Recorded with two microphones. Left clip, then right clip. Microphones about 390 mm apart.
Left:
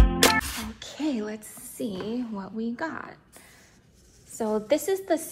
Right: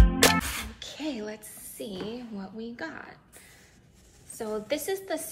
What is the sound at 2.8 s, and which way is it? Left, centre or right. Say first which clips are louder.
Speech: left 4 dB; centre.